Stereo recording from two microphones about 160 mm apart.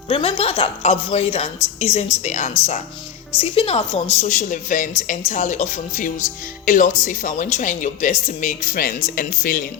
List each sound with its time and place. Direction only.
0.1 s a woman's voice: 35° left (ahead or behind); by 9.6 s 55° left (ahead or behind)